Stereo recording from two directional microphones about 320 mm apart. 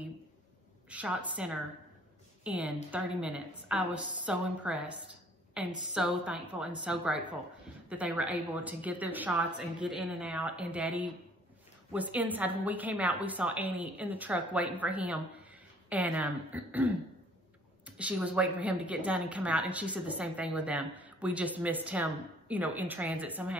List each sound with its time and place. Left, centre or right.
0.8 s a woman's voice: centre